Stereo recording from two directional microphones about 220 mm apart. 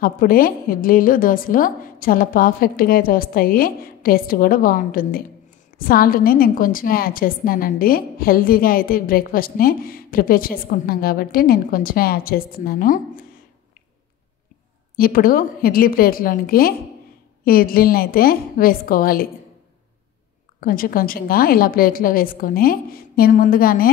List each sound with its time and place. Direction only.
0.0 s a woman's voice: 40° left (ahead or behind)
15.0 s a woman's voice: 40° left (ahead or behind)
20.6 s a woman's voice: 40° left (ahead or behind)